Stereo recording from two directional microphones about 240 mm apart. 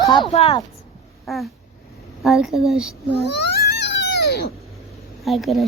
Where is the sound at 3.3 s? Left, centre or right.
Left.